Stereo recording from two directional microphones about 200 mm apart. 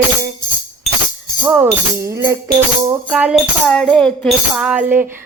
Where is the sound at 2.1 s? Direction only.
15° right (ahead or behind).